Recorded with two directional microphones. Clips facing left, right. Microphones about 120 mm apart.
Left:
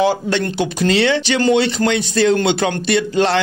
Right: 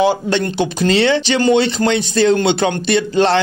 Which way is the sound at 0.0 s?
25° right (ahead or behind).